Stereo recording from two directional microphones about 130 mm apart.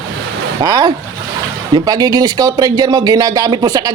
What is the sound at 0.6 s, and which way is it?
A man's voice, 30° right (ahead or behind).